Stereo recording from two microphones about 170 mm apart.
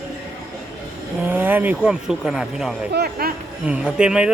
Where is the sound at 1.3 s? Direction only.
10° right (ahead or behind).